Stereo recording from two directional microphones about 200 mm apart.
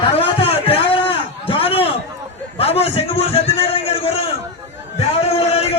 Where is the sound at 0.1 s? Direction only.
30° left (ahead or behind).